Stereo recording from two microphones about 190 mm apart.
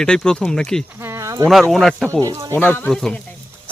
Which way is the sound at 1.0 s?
15° right (ahead or behind).